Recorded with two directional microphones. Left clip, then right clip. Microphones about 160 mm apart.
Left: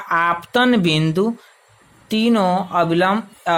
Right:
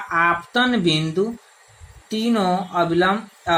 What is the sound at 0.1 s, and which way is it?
Speech, 90° left.